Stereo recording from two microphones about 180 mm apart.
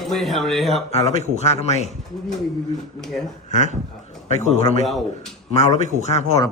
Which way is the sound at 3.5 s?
40° left (ahead or behind).